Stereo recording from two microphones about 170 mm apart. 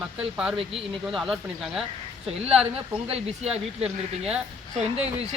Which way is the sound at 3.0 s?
35° right (ahead or behind).